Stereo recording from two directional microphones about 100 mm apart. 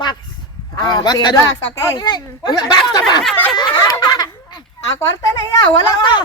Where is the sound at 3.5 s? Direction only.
40° left (ahead or behind).